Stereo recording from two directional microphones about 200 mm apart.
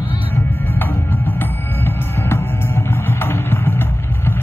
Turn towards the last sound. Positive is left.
turn(degrees=10)  # may be behind; listen again after turning